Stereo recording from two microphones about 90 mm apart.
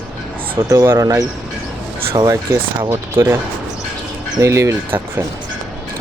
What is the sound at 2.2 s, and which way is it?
Speech, 50° right (ahead or behind).